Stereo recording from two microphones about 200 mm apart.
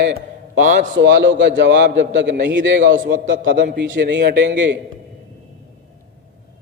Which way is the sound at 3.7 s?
60° right (ahead or behind).